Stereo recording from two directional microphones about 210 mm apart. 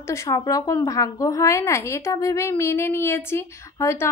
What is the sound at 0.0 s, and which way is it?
A woman's voice, 15° left (ahead or behind).